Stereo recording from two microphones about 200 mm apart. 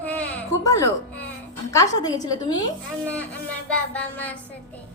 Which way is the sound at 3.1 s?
5° left (ahead or behind).